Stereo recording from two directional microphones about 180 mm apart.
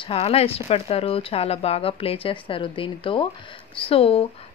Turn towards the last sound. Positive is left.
turn(degrees=35)  # may be behind; listen again after turning